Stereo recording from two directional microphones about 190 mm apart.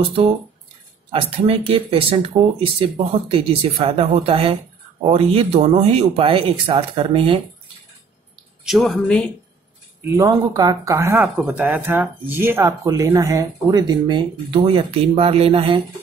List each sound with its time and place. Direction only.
1.4 s speech: 30° right (ahead or behind)
8.6 s speech: centre (ahead or behind)
10.0 s speech: 15° right (ahead or behind)
11.1 s speech: 5° right (ahead or behind); by 15.8 s 30° right (ahead or behind)